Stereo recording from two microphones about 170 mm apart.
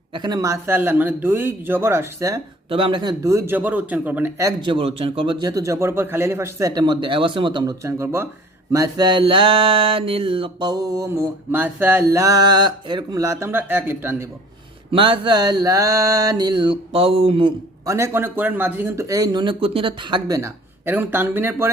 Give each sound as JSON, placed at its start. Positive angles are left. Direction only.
{"t": 0.1, "sound": "speech", "side_deg": -25}
{"t": 2.6, "sound": "speech", "side_deg": -30}
{"t": 4.7, "sound": "a man's voice", "side_deg": -35}
{"t": 8.7, "sound": "a sound", "side_deg": -20}
{"t": 11.5, "sound": "speech", "side_deg": -10}
{"t": 14.9, "sound": "a man's voice", "side_deg": -30}
{"t": 17.8, "sound": "speech", "side_deg": -15}